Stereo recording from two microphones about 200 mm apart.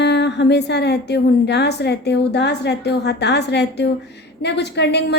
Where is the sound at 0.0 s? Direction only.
60° left (ahead or behind).